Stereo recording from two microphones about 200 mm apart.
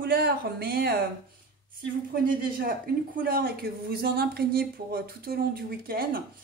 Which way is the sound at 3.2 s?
45° right (ahead or behind).